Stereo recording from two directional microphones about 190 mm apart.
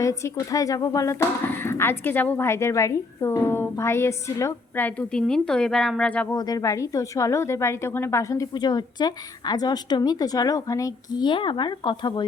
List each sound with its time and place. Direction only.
0.0 s a woman's voice: 15° left (ahead or behind)
6.3 s a woman's voice: 20° left (ahead or behind)